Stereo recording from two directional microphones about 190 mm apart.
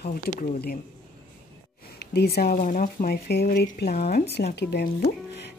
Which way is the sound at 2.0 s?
60° left (ahead or behind).